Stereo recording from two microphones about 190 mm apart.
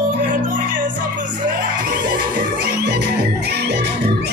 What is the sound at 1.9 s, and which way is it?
Music, 50° right (ahead or behind).